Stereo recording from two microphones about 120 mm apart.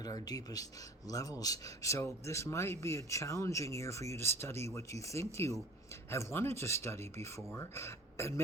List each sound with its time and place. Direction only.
0.0 s speech: 30° left (ahead or behind)